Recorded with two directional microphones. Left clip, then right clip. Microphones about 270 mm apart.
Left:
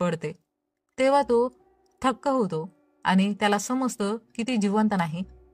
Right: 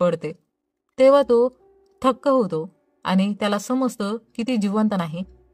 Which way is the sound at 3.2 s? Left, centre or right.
Left.